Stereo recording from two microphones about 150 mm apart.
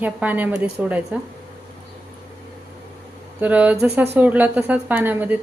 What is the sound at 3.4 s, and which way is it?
A woman's voice, 10° right (ahead or behind).